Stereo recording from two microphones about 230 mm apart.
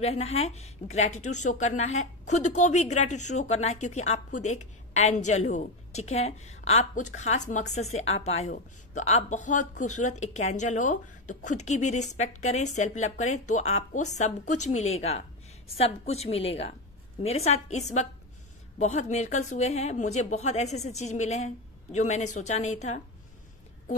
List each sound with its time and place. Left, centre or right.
0.0 s a woman's voice: left